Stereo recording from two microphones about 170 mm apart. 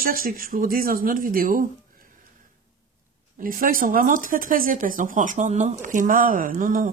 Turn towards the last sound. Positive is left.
turn(degrees=-50)  # may be behind; listen again after turning